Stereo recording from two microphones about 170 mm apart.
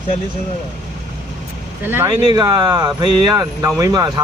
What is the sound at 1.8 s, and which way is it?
Speech, 10° right (ahead or behind).